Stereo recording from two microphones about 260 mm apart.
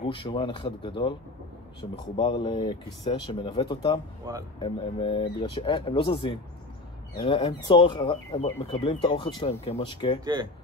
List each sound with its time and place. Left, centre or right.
0.0 s speech: centre
10.2 s speech: centre